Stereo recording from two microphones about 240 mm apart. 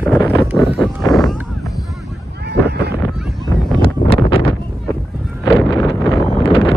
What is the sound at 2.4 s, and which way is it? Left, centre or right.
Boat, right.